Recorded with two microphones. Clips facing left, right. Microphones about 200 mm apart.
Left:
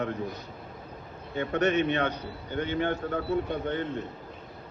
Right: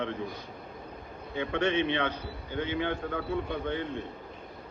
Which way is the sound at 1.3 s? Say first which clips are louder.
Left 3 dB; 45° left (ahead or behind).